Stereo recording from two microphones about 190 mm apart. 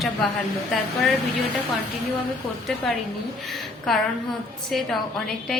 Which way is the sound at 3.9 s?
Centre (ahead or behind).